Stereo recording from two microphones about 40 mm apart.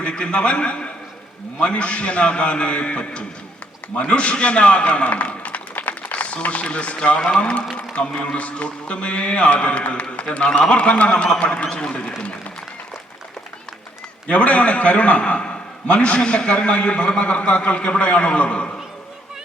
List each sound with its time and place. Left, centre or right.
0.0 s a man's voice: left
14.3 s a man's voice: left